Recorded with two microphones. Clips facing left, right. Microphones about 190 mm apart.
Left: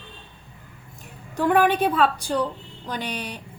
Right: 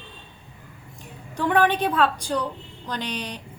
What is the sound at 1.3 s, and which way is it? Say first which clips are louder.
A woman's voice: left 2 dB; 5° left (ahead or behind).